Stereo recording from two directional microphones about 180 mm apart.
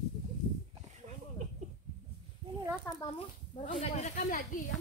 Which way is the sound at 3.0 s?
30° left (ahead or behind).